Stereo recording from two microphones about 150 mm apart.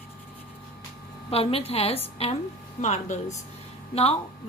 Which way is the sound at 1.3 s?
40° left (ahead or behind).